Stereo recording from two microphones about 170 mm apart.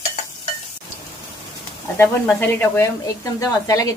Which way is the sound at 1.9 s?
10° left (ahead or behind).